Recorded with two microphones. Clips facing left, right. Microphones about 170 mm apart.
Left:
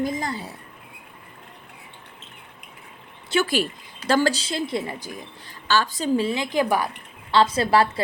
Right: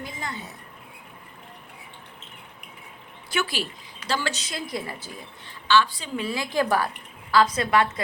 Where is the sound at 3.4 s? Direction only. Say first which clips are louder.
Left 7 dB; 50° left (ahead or behind).